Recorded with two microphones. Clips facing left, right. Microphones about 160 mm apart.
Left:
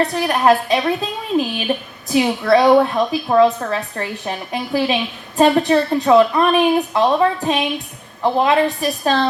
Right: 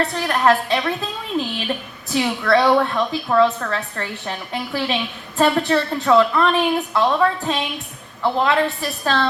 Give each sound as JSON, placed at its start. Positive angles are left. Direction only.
{"t": 0.1, "sound": "a woman's voice", "side_deg": 15}